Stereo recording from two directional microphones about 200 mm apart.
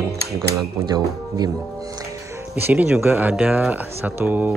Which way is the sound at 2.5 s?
10° right (ahead or behind).